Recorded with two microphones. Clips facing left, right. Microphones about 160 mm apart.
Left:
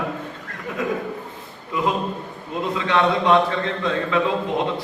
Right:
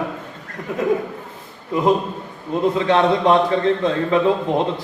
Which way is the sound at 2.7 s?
35° right (ahead or behind).